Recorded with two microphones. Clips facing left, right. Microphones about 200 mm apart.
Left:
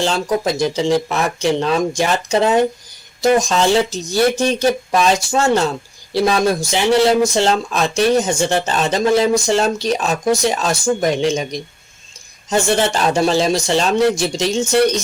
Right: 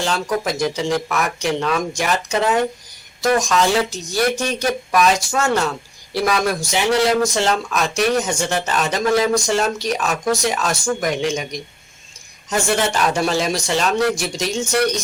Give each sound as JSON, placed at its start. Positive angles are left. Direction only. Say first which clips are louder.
{"t": 0.0, "sound": "speech", "louder": "left 3 dB", "side_deg": 25}